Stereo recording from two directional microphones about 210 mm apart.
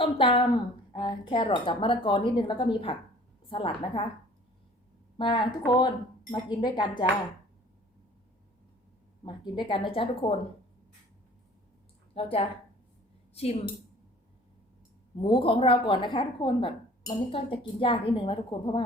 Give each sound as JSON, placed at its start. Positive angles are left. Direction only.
{"t": 0.0, "sound": "a woman's voice", "side_deg": 25}
{"t": 5.1, "sound": "a woman's voice", "side_deg": 20}
{"t": 9.2, "sound": "a woman's voice", "side_deg": 25}
{"t": 12.1, "sound": "a woman's voice", "side_deg": 25}
{"t": 15.2, "sound": "a woman's voice", "side_deg": 25}